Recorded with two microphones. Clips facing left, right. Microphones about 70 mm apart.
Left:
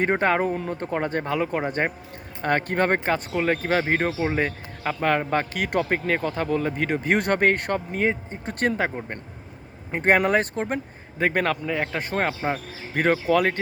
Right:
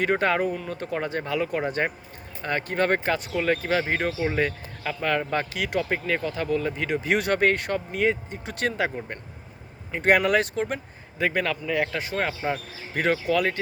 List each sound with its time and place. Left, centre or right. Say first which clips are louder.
0.0 s speech: left 1 dB; left
9.9 s speech: left 1 dB; left
11.7 s speech: right 1 dB; left
11.9 s speech: left 2 dB; left